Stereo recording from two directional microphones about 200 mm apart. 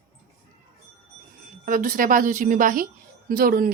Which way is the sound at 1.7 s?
45° right (ahead or behind).